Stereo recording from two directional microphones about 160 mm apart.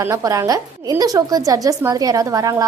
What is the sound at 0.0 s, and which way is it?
A woman's voice, 20° right (ahead or behind).